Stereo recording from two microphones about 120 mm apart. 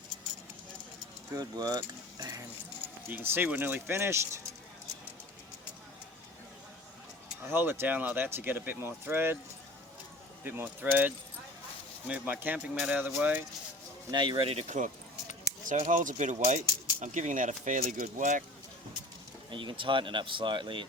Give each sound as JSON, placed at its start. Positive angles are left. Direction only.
{"t": 1.4, "sound": "speech", "side_deg": -35}
{"t": 7.5, "sound": "speech", "side_deg": -20}
{"t": 10.4, "sound": "speech", "side_deg": -15}
{"t": 14.1, "sound": "speech", "side_deg": -40}
{"t": 15.6, "sound": "speech", "side_deg": -90}
{"t": 19.5, "sound": "speech", "side_deg": -45}